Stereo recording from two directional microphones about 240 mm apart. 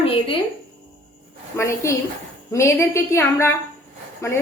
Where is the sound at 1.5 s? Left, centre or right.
Centre.